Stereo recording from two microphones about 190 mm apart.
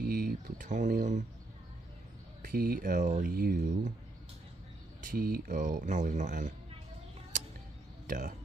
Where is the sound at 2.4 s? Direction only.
50° right (ahead or behind).